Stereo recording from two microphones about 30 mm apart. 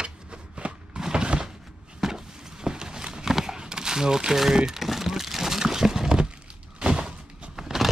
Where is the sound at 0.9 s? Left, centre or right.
Right.